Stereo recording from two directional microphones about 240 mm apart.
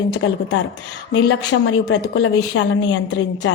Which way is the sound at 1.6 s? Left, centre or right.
Left.